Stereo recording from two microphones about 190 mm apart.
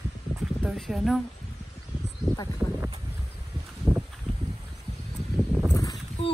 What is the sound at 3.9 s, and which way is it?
Walk, 15° right (ahead or behind).